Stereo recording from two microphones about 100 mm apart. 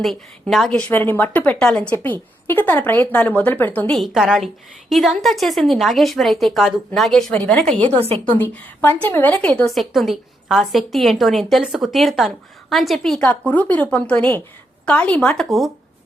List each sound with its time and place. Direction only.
0.0 s a woman's voice: centre (ahead or behind)
0.7 s a woman's voice: 15° left (ahead or behind)
3.9 s a woman's voice: centre (ahead or behind)
7.8 s a woman's voice: 90° right
8.4 s a woman's voice: 20° left (ahead or behind)
9.7 s a woman's voice: centre (ahead or behind)